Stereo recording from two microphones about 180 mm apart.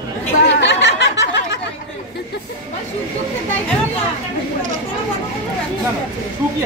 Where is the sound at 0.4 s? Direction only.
75° left (ahead or behind).